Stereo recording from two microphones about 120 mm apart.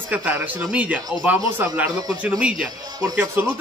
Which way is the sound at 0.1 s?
15° right (ahead or behind).